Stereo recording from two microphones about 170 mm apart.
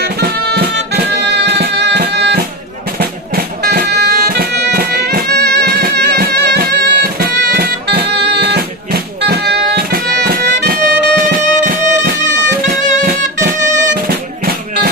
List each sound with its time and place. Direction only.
0.0 s music: 75° right (ahead or behind)
3.0 s music: 65° right (ahead or behind)